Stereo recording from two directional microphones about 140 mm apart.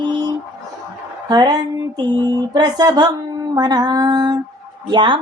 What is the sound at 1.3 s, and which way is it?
Speech, 25° right (ahead or behind).